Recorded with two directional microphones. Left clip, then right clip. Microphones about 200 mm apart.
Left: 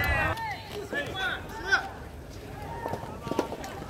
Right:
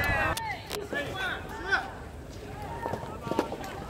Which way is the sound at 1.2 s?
35° left (ahead or behind).